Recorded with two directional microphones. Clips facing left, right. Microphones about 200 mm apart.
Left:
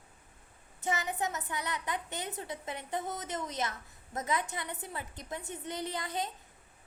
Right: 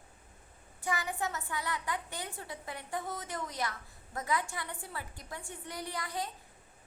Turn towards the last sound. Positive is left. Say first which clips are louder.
# left 2 dB
turn(degrees=20)  # may be behind; listen again after turning